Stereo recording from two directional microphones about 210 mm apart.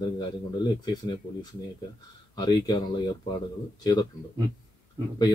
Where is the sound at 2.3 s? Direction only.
20° left (ahead or behind).